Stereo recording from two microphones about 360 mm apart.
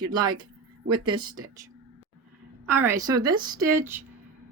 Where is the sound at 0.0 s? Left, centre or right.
Centre.